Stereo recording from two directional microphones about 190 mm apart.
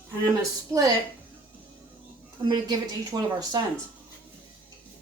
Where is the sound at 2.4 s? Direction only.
20° right (ahead or behind).